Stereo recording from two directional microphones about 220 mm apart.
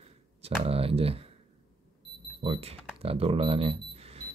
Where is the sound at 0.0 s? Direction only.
25° right (ahead or behind).